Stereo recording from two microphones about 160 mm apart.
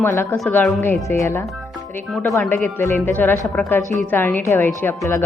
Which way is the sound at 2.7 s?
15° left (ahead or behind).